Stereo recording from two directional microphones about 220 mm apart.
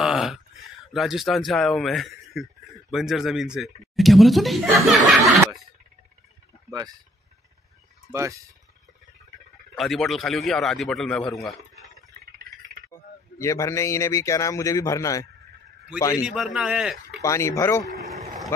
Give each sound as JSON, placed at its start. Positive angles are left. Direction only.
{"t": 0.0, "sound": "a sound", "side_deg": 0}
{"t": 0.9, "sound": "speech", "side_deg": 0}
{"t": 6.7, "sound": "speech", "side_deg": -20}
{"t": 8.1, "sound": "speech", "side_deg": -15}
{"t": 9.8, "sound": "speech", "side_deg": 0}
{"t": 12.9, "sound": "speech", "side_deg": 15}
{"t": 16.3, "sound": "speech", "side_deg": 0}
{"t": 17.2, "sound": "speech", "side_deg": 15}